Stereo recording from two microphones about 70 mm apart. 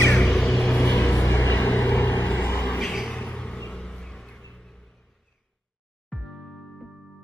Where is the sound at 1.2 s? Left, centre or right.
Left.